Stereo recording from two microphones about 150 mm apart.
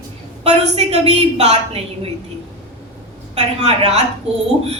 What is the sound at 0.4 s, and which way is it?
A woman's voice, 45° right (ahead or behind).